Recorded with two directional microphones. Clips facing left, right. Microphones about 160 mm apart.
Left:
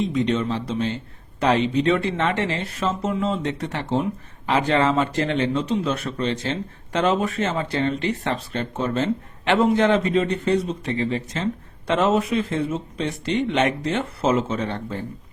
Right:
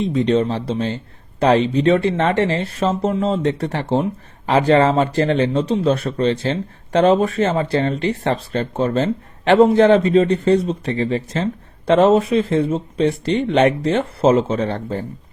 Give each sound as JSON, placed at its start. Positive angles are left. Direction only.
{"t": 0.1, "sound": "speech", "side_deg": -35}